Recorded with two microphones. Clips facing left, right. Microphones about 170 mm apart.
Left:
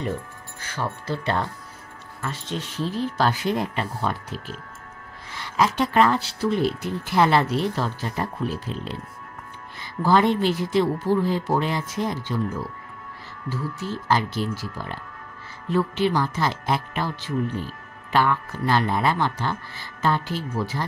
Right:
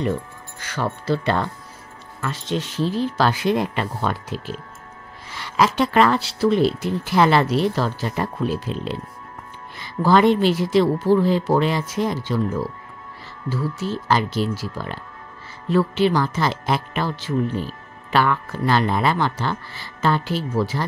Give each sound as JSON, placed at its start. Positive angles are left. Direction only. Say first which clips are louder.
{"t": 0.6, "sound": "speech", "louder": "right 4 dB", "side_deg": -90}
{"t": 5.3, "sound": "a sound", "louder": "right 3 dB", "side_deg": -90}
{"t": 5.8, "sound": "speech", "louder": "right 2 dB", "side_deg": -90}
{"t": 13.5, "sound": "speech", "louder": "right 4 dB", "side_deg": -90}
{"t": 18.1, "sound": "speech", "louder": "right 2 dB", "side_deg": -90}